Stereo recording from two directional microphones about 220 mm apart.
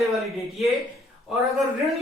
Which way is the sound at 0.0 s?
Centre (ahead or behind).